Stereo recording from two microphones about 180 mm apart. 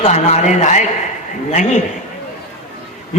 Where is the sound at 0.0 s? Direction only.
35° left (ahead or behind).